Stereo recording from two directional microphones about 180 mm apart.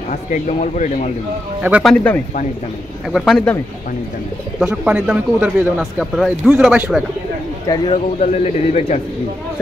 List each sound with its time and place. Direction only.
0.1 s a man's voice: 45° left (ahead or behind)
1.6 s speech: 5° right (ahead or behind)
4.6 s speech: 5° right (ahead or behind)
7.6 s speech: 20° left (ahead or behind)
8.2 s speech: 40° left (ahead or behind)